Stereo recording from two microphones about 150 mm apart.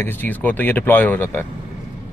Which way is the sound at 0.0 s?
15° left (ahead or behind).